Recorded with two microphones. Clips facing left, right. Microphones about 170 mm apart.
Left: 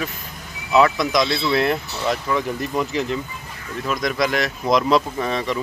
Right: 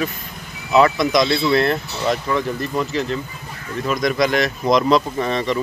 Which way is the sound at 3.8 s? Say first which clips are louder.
Right 3 dB; centre (ahead or behind).